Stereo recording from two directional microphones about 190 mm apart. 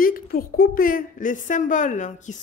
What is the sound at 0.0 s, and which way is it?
A woman's voice, 50° left (ahead or behind).